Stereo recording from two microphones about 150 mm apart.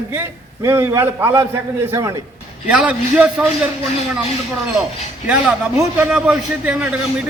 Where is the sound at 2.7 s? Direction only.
5° right (ahead or behind).